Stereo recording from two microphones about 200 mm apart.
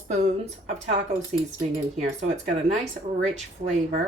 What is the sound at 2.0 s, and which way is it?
Speech, 35° right (ahead or behind).